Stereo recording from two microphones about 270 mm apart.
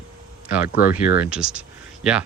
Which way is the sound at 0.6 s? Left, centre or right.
Left.